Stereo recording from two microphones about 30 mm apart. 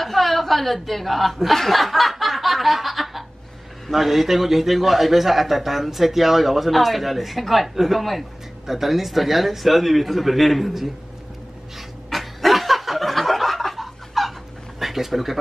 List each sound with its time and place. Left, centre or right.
0.0 s a man's voice: centre
12.1 s snicker: centre
14.8 s speech: centre